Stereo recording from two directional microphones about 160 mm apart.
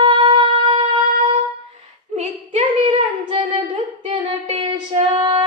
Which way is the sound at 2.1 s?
45° right (ahead or behind).